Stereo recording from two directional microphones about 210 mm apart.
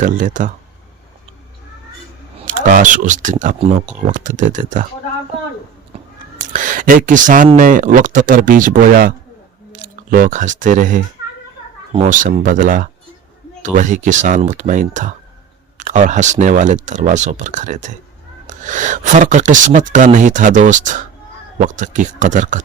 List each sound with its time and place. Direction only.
0.0 s speech: 35° right (ahead or behind)
2.5 s speech: 40° right (ahead or behind)
5.9 s a sound: 25° right (ahead or behind)
6.4 s speech: 40° right (ahead or behind)